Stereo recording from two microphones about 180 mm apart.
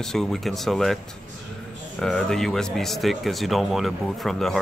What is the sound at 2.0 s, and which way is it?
Speech, 5° left (ahead or behind).